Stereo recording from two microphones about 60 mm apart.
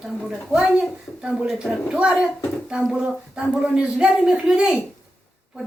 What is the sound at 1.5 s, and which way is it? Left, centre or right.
Speech, centre.